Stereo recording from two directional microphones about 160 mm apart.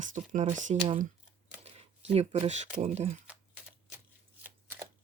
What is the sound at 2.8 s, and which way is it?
Speech, 45° right (ahead or behind).